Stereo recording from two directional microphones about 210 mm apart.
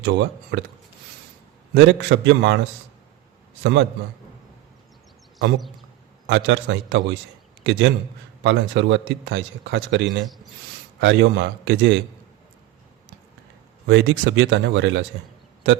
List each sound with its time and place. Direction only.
0.0 s a man's voice: 55° right (ahead or behind)
1.7 s a man's voice: 60° right (ahead or behind)
3.6 s a man's voice: 55° right (ahead or behind)
6.2 s a man's voice: 60° right (ahead or behind)
13.8 s a man's voice: 60° right (ahead or behind)